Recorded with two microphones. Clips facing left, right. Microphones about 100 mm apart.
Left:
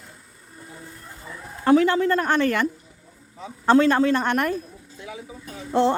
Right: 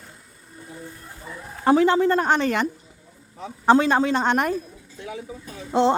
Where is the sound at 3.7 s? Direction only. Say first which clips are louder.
Left 1 dB; 20° right (ahead or behind).